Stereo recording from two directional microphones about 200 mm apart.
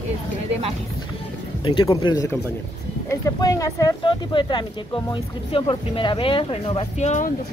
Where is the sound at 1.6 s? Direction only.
25° left (ahead or behind).